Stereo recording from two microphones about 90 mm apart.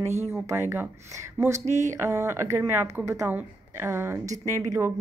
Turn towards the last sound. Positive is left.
turn(degrees=-30)  # may be behind; listen again after turning